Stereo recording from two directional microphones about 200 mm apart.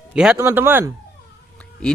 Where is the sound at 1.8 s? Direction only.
5° left (ahead or behind).